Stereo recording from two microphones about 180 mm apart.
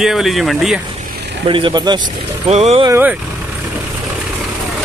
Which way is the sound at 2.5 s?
35° right (ahead or behind).